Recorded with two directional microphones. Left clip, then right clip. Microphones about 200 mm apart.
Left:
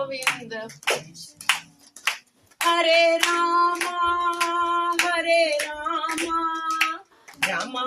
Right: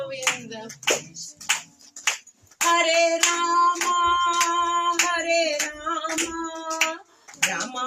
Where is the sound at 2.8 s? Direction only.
30° left (ahead or behind).